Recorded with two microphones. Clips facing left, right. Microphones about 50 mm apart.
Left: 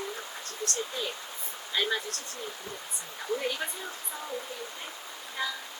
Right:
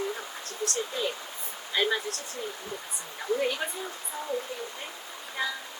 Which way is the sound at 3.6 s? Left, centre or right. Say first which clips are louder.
Right 2 dB; centre.